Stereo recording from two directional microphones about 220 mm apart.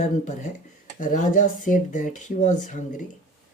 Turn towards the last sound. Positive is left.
turn(degrees=35)  # may be behind; listen again after turning